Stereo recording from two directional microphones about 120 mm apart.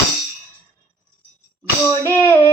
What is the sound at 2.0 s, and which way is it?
Music, 20° left (ahead or behind).